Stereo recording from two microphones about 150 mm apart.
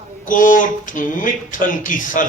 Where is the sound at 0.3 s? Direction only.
65° left (ahead or behind).